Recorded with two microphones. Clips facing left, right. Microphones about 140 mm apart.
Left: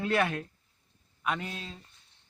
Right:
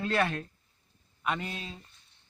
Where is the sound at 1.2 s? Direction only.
Centre (ahead or behind).